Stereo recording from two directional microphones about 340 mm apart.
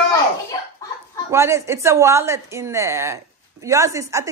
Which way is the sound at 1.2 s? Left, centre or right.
Centre.